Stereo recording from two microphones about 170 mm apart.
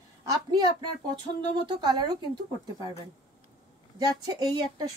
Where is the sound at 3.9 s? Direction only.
20° right (ahead or behind).